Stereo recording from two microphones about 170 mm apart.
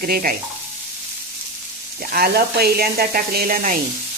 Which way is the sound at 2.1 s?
65° right (ahead or behind).